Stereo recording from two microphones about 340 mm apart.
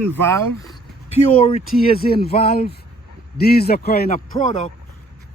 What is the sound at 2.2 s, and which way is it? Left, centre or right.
A man's voice, left.